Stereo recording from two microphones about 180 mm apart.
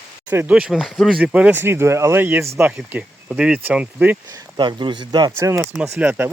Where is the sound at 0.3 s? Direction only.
10° right (ahead or behind).